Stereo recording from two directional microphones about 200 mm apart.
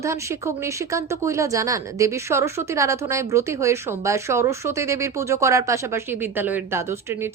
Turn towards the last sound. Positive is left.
turn(degrees=-10)  # may be behind; listen again after turning